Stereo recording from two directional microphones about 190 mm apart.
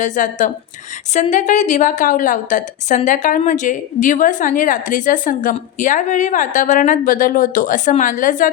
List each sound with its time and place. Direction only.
0.0 s a woman's voice: 40° left (ahead or behind)